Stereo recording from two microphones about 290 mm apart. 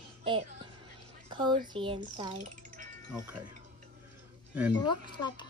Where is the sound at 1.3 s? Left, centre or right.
Centre.